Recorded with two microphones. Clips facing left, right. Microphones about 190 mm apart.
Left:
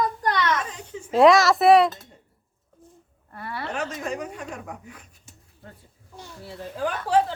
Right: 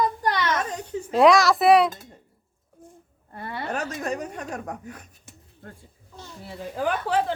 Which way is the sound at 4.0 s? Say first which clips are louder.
Right 1 dB; 40° right (ahead or behind).